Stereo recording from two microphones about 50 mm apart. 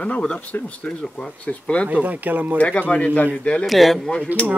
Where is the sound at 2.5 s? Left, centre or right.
Left.